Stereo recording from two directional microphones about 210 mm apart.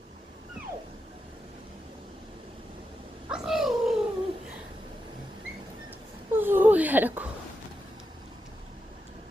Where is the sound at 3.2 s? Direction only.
5° right (ahead or behind).